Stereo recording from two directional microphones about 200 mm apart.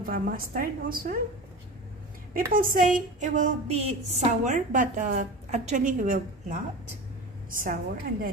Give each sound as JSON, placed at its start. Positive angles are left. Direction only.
{"t": 0.0, "sound": "a woman's voice", "side_deg": -45}
{"t": 2.3, "sound": "a woman's voice", "side_deg": -45}
{"t": 7.6, "sound": "a woman's voice", "side_deg": -45}